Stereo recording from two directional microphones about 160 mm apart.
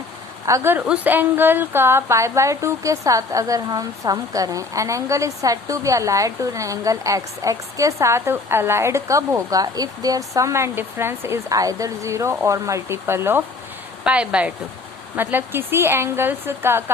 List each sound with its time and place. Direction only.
0.4 s a woman's voice: 15° right (ahead or behind)